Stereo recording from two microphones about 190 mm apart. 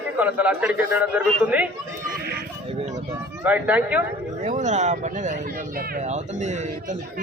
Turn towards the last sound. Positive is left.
turn(degrees=-40)  # may be behind; listen again after turning